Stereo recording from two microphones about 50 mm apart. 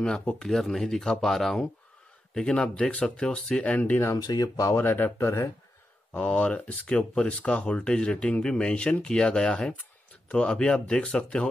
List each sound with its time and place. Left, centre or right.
0.5 s speech: centre
2.3 s speech: centre
3.7 s speech: left
4.0 s speech: left
4.7 s speech: left
6.1 s speech: left